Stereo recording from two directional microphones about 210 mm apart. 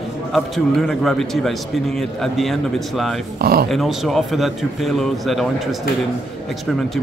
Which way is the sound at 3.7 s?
Centre (ahead or behind).